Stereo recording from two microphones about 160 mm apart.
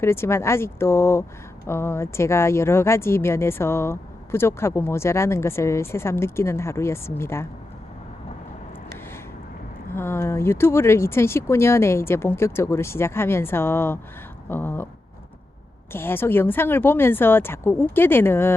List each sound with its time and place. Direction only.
0.0 s speech: 15° left (ahead or behind)
9.9 s speech: 15° left (ahead or behind)
15.9 s speech: 15° left (ahead or behind)